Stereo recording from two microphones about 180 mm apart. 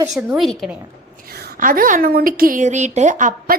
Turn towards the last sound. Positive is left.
turn(degrees=-45)  # may be behind; listen again after turning